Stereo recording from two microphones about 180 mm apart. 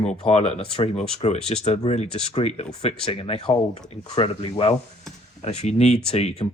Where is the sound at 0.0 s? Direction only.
35° left (ahead or behind).